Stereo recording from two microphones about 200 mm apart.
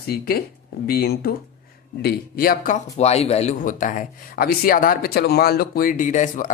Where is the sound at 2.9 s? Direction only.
30° left (ahead or behind).